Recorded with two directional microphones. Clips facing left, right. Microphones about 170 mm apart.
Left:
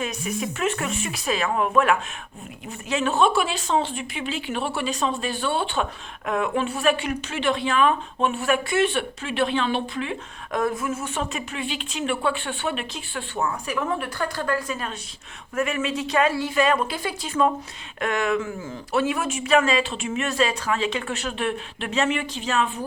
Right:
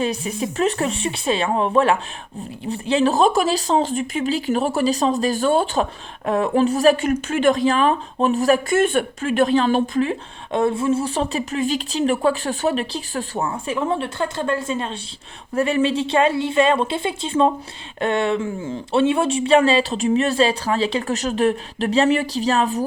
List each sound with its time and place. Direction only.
0.0 s speech: 30° right (ahead or behind)
10.5 s speech: 25° right (ahead or behind)